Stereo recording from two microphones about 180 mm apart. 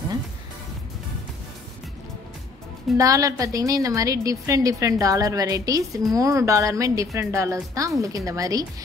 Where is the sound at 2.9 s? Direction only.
20° right (ahead or behind).